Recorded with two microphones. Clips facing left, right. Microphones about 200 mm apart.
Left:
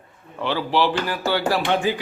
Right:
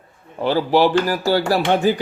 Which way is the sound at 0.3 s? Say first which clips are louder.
Right 5 dB; 40° right (ahead or behind).